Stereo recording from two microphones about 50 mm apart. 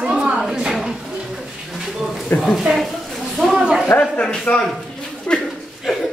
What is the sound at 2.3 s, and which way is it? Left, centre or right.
Speech, left.